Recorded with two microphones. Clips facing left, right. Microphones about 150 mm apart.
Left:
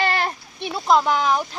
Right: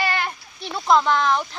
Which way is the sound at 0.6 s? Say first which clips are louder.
Even; 10° left (ahead or behind).